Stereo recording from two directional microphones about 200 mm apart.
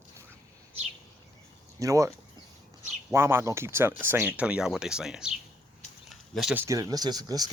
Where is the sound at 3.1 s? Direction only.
10° right (ahead or behind).